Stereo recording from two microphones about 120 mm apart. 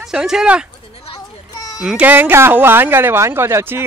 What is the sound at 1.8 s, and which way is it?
Speech, 10° right (ahead or behind).